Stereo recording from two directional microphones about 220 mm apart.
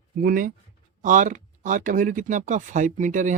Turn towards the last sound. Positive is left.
turn(degrees=-35)  # may be behind; listen again after turning